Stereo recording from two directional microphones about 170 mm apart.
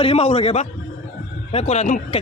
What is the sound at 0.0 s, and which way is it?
Speech, 35° left (ahead or behind).